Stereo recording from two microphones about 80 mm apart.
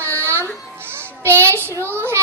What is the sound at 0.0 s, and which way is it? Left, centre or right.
Baby cry, right.